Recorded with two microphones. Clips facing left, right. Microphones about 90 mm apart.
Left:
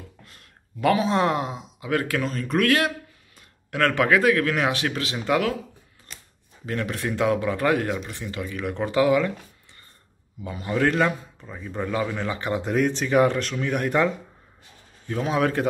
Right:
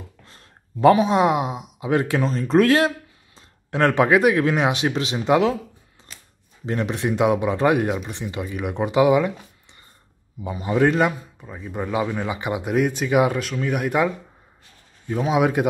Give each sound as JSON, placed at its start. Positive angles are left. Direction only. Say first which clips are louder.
{"t": 0.2, "sound": "speech", "louder": "right 1 dB", "side_deg": -30}
{"t": 6.6, "sound": "speech", "louder": "right 4 dB", "side_deg": -20}